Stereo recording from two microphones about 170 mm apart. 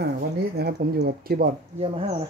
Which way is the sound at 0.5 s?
65° right (ahead or behind).